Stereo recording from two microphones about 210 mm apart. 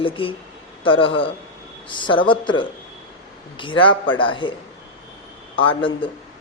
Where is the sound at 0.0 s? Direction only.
25° left (ahead or behind).